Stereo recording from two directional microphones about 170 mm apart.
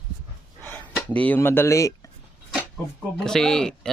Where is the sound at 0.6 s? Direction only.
10° left (ahead or behind).